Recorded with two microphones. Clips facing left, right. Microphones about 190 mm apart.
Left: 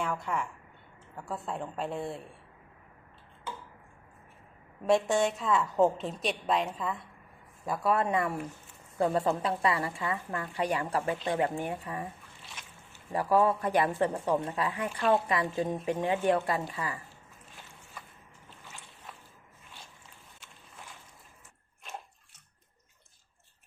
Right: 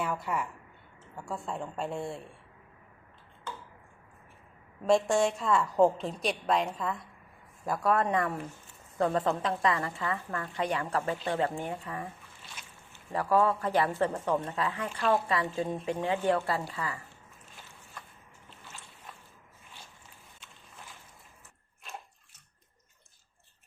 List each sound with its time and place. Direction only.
0.0 s a woman's voice: 5° right (ahead or behind)
4.9 s a woman's voice: centre (ahead or behind)
18.0 s vehicle: 5° left (ahead or behind)